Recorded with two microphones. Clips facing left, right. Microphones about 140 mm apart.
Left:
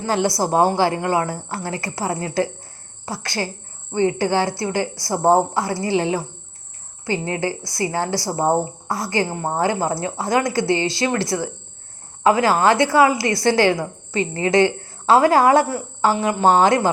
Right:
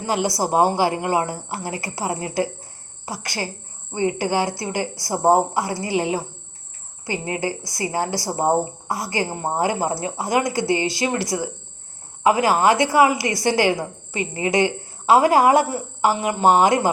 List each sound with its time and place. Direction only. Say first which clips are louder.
0.0 s a woman's voice: left 2 dB; 15° right (ahead or behind)